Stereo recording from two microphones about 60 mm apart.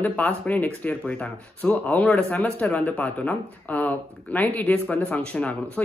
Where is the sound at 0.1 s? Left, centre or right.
Left.